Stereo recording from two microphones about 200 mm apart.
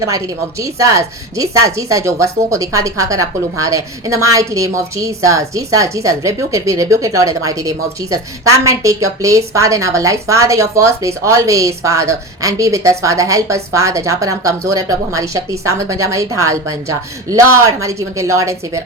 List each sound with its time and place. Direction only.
0.6 s speech: 15° right (ahead or behind)